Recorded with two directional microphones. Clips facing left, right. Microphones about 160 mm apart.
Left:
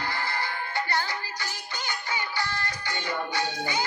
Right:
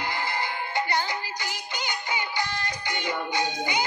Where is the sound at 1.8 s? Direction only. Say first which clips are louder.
Right 2 dB; 15° right (ahead or behind).